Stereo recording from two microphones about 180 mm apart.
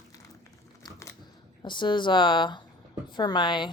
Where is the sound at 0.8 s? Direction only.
15° left (ahead or behind).